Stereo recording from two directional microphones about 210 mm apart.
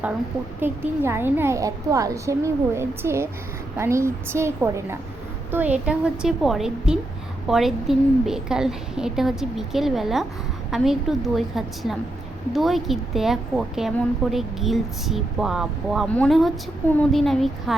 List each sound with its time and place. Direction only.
0.6 s a woman's voice: 10° right (ahead or behind)